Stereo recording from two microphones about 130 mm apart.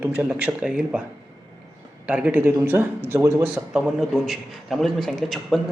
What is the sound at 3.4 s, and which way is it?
A man's voice, 5° right (ahead or behind).